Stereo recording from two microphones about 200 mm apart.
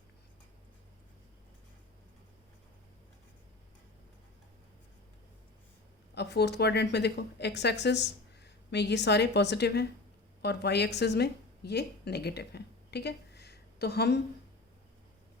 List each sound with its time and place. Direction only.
6.1 s a woman's voice: 55° left (ahead or behind)